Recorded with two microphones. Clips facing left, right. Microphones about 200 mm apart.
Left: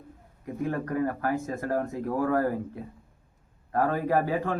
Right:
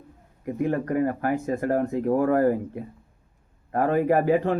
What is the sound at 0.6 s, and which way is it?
Speech, 20° right (ahead or behind).